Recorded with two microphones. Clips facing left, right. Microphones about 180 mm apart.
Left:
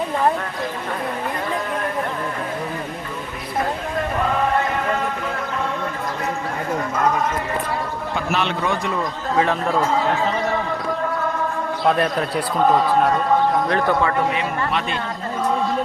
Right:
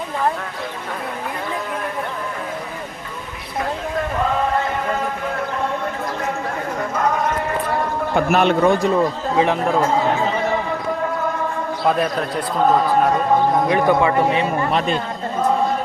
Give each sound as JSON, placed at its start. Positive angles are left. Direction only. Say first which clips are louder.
{"t": 8.1, "sound": "a man's voice", "louder": "right 7 dB", "side_deg": -50}
{"t": 9.3, "sound": "a man's voice", "louder": "even", "side_deg": -15}
{"t": 11.9, "sound": "a man's voice", "louder": "even", "side_deg": 0}
{"t": 13.7, "sound": "a man's voice", "louder": "right 3 dB", "side_deg": -10}
{"t": 14.7, "sound": "speech", "louder": "right 4 dB", "side_deg": -35}